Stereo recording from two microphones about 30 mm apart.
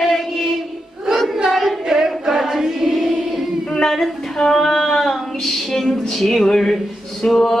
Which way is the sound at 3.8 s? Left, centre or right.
Centre.